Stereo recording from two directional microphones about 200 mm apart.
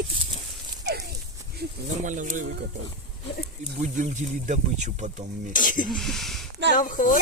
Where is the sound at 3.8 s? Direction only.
40° right (ahead or behind).